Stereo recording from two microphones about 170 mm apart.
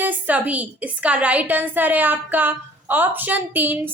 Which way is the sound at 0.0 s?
10° right (ahead or behind).